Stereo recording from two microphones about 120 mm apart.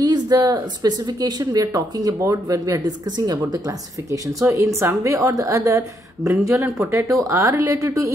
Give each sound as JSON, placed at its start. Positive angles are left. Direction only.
{"t": 0.0, "sound": "speech", "side_deg": -35}